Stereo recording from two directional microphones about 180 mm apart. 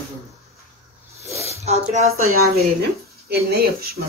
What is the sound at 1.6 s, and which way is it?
Speech, 35° right (ahead or behind).